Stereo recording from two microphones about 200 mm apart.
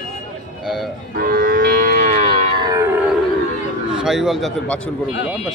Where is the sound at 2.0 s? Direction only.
30° right (ahead or behind); by 3.0 s 15° right (ahead or behind).